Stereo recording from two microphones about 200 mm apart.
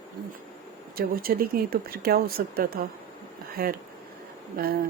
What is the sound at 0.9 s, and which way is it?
Speech, 50° right (ahead or behind).